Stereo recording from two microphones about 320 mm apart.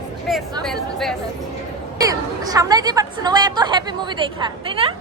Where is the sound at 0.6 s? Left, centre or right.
Centre.